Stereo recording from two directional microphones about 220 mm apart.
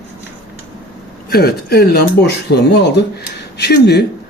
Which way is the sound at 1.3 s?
45° left (ahead or behind).